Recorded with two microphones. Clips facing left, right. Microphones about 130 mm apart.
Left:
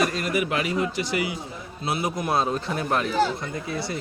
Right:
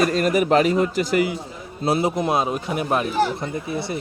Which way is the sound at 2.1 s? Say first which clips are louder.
Right 3 dB; 20° right (ahead or behind).